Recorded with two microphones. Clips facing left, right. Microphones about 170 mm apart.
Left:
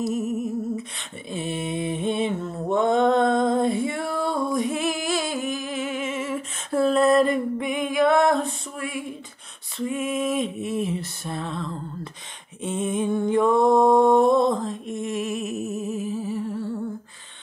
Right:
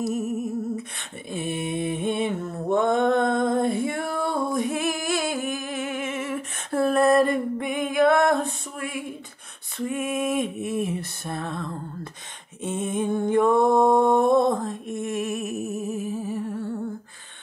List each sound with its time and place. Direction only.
0.9 s a sound: 55° right (ahead or behind)
9.8 s lullaby: 55° right (ahead or behind)
12.6 s music: 50° right (ahead or behind)